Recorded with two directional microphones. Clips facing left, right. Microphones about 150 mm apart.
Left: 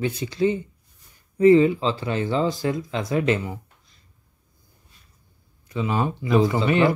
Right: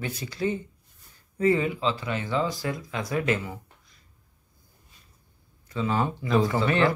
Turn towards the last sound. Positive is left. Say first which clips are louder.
# left 4 dB
turn(degrees=15)  # may be behind; listen again after turning